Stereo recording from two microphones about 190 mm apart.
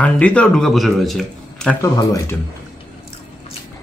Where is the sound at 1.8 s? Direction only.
15° left (ahead or behind).